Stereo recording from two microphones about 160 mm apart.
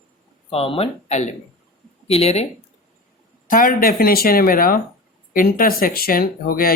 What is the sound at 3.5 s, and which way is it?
Speech, 60° left (ahead or behind).